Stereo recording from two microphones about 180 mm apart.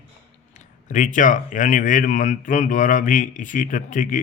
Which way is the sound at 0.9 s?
45° left (ahead or behind).